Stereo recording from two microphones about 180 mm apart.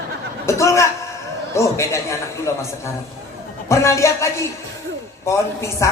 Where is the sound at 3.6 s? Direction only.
15° left (ahead or behind).